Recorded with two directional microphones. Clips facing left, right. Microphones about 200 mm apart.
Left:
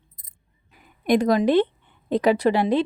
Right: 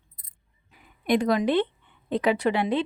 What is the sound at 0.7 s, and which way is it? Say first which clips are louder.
A woman's voice: left 3 dB; 45° left (ahead or behind).